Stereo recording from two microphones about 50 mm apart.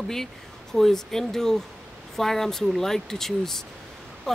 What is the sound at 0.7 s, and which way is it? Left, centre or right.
Speech, centre.